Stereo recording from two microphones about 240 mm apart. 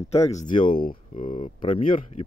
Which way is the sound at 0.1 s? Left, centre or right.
Left.